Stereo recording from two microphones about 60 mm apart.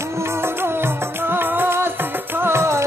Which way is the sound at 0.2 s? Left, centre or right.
Right.